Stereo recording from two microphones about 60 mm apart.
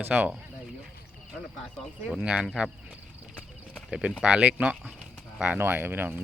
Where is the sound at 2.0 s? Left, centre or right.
Centre.